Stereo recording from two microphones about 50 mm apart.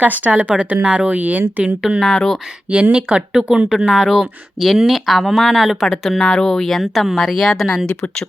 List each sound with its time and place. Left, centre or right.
0.0 s speech: right
0.4 s a woman's voice: centre
2.1 s speech: centre
2.6 s speech: right; by 5.7 s centre
5.8 s speech: centre